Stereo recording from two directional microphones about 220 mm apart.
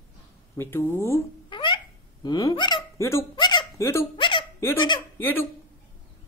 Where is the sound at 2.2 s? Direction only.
20° left (ahead or behind).